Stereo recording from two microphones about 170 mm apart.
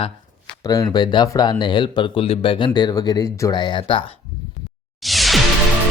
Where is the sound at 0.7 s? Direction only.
25° left (ahead or behind).